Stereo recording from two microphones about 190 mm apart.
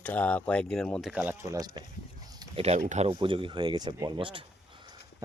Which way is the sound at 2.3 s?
20° right (ahead or behind).